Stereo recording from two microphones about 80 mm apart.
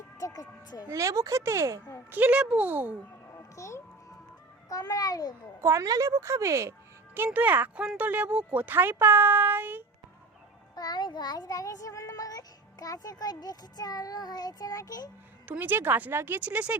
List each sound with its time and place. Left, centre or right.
0.2 s speech: left
0.9 s speech: right
2.0 s speech: right
3.3 s music: left
4.7 s child singing: left
5.6 s speech: right
7.3 s speech: right
10.8 s child singing: left
15.4 s speech: right